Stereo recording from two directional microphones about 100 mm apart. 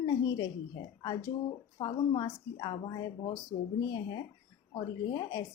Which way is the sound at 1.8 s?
45° left (ahead or behind).